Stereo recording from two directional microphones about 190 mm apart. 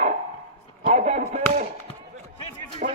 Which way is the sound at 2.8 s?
45° right (ahead or behind).